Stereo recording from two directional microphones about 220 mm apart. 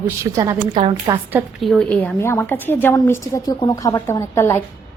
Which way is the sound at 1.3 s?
Centre (ahead or behind).